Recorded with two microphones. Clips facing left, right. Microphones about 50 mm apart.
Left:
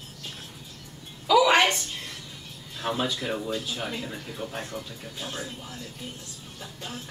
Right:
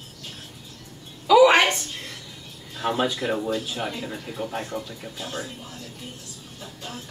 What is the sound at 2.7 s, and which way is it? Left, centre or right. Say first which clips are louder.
Speech: right 4 dB; centre.